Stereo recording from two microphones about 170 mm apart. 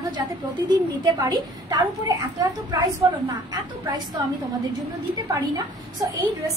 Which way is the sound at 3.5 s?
25° right (ahead or behind).